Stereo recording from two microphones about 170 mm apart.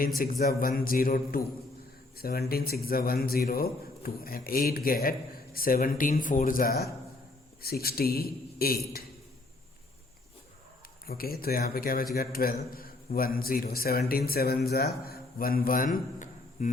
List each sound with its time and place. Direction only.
0.2 s a man's voice: 60° left (ahead or behind)
11.0 s a man's voice: 60° left (ahead or behind)